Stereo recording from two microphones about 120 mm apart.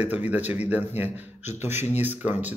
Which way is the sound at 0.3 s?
15° right (ahead or behind).